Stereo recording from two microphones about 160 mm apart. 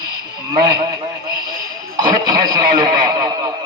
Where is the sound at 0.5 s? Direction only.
25° right (ahead or behind).